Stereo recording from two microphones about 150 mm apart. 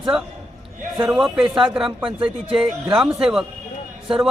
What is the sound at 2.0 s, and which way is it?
Speech, 35° right (ahead or behind).